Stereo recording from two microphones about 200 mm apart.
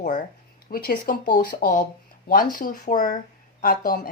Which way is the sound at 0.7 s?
45° left (ahead or behind).